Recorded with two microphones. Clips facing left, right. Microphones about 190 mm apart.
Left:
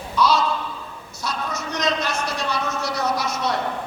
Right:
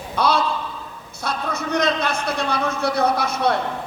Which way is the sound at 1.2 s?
55° right (ahead or behind).